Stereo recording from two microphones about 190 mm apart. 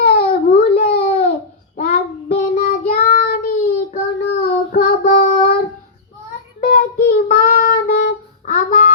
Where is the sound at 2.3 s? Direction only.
45° left (ahead or behind).